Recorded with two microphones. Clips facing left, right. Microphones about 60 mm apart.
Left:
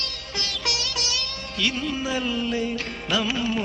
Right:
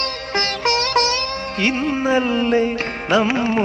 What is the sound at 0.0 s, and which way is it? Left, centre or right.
Sitar, right.